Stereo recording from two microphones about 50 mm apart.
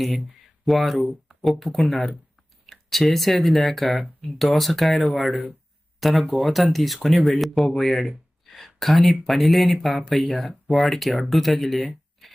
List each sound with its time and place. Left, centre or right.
0.6 s speech: centre